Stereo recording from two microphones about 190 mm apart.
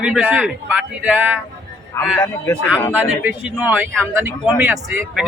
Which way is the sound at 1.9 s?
15° left (ahead or behind).